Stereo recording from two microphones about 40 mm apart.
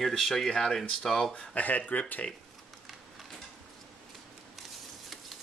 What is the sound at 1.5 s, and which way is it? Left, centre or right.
Speech, left.